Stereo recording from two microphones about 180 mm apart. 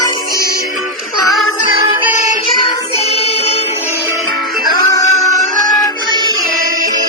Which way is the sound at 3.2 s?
35° left (ahead or behind).